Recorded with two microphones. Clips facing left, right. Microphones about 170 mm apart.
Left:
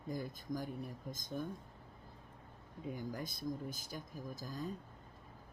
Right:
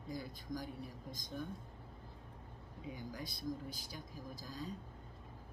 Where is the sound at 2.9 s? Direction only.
50° left (ahead or behind).